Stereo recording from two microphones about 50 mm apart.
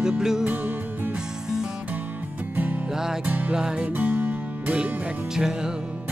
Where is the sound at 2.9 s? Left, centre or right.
Centre.